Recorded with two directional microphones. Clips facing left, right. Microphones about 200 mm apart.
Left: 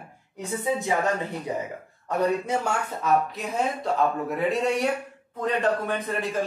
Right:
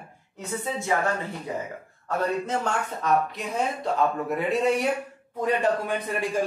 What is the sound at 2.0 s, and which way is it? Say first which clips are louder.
Speech: left 2 dB; 15° left (ahead or behind).